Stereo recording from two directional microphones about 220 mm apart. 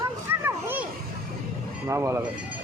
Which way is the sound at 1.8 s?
10° right (ahead or behind).